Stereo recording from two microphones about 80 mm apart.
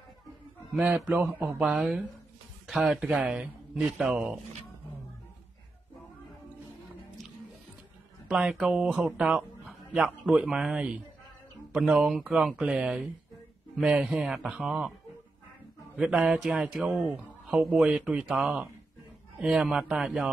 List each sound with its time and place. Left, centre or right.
1.0 s speech: centre
8.3 s speech: centre
16.2 s speech: centre